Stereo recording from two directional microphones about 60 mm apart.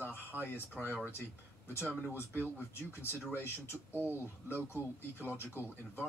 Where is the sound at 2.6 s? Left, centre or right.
Left.